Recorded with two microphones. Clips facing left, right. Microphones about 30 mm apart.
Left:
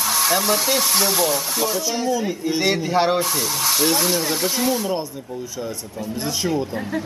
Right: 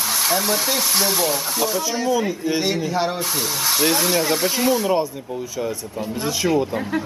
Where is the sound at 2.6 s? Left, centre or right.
Left.